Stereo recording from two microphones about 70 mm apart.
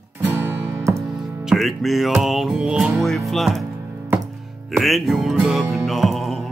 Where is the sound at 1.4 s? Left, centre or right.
Centre.